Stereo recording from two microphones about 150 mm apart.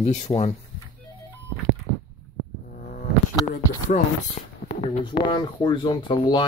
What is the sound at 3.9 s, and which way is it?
Speech, 60° left (ahead or behind).